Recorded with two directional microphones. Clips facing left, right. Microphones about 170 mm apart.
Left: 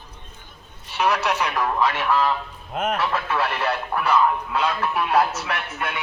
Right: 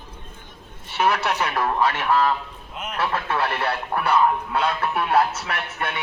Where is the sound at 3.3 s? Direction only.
30° right (ahead or behind).